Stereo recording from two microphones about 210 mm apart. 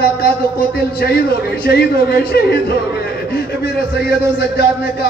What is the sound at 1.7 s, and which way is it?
Speech, 50° left (ahead or behind).